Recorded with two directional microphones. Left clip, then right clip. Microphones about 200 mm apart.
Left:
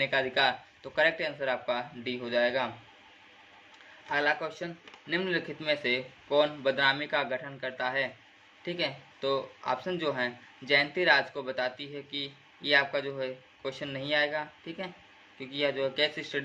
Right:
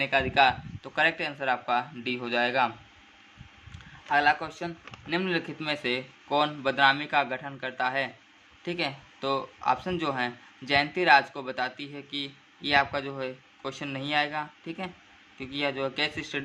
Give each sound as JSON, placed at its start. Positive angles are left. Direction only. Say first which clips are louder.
{"t": 0.0, "sound": "speech", "louder": "right 4 dB", "side_deg": -15}
{"t": 4.1, "sound": "speech", "louder": "right 5 dB", "side_deg": -20}